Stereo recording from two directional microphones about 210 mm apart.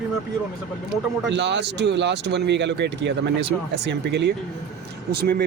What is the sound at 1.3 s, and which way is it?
Speech, 55° right (ahead or behind).